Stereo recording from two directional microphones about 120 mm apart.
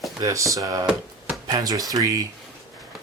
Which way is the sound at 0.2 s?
25° right (ahead or behind).